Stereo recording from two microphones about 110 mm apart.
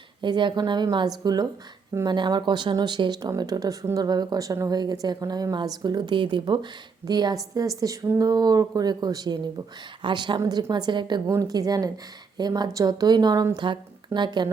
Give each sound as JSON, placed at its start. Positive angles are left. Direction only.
{"t": 0.2, "sound": "a woman's voice", "side_deg": -45}
{"t": 11.3, "sound": "speech", "side_deg": -30}